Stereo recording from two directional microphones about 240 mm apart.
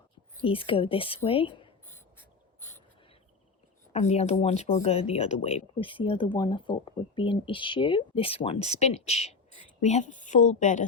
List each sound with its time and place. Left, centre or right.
0.4 s speech: left
1.9 s a sound: centre
3.9 s a woman's voice: left